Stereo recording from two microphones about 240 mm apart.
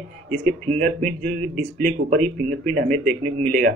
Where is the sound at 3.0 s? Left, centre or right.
Centre.